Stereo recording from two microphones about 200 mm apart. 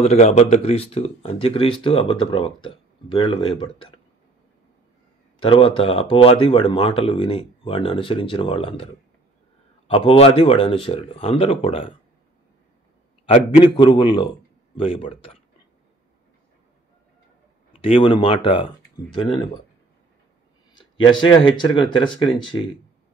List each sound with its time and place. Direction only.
0.0 s speech: 35° left (ahead or behind)
5.4 s speech: 25° left (ahead or behind)
13.2 s speech: 30° left (ahead or behind)
17.8 s speech: 25° left (ahead or behind)
20.7 s speech: 25° left (ahead or behind)